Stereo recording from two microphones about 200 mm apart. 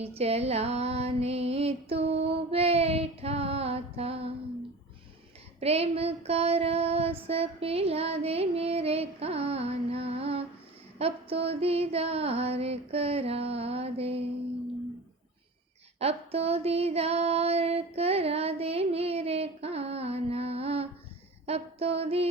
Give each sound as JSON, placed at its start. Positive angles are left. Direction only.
{"t": 0.2, "sound": "music", "side_deg": -30}
{"t": 5.5, "sound": "female singing", "side_deg": -30}
{"t": 16.0, "sound": "female singing", "side_deg": -30}